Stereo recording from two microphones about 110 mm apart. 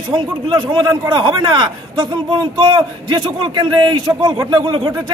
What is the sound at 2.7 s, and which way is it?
A man's voice, 50° right (ahead or behind).